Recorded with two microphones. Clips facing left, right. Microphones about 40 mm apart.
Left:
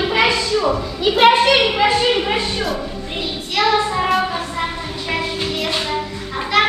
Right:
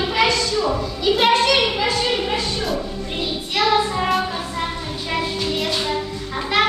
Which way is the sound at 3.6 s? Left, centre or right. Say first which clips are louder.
Left 2 dB; centre.